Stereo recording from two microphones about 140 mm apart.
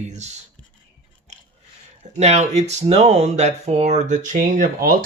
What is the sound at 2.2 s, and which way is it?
Speech, 55° right (ahead or behind).